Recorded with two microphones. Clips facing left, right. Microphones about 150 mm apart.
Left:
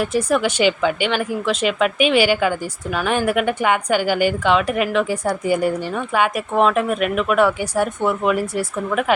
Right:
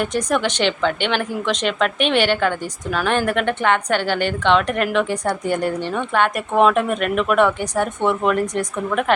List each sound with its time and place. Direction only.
0.0 s a woman's voice: 5° left (ahead or behind)